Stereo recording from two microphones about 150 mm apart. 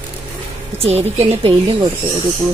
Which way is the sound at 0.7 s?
45° right (ahead or behind).